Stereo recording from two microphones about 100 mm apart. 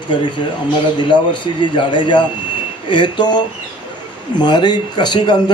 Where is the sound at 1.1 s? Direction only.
55° left (ahead or behind).